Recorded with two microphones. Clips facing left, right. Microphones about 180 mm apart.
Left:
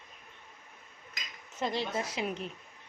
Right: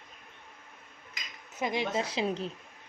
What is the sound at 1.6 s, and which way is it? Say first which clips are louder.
Speech: right 2 dB; 15° right (ahead or behind).